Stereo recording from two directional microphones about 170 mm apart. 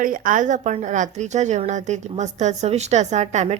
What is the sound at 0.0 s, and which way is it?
Speech, 55° right (ahead or behind).